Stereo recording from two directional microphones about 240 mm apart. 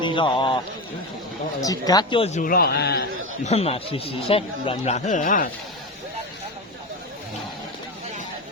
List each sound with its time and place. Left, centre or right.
0.0 s a man's voice: centre
1.6 s speech: centre; by 3.0 s left
3.4 s speech: left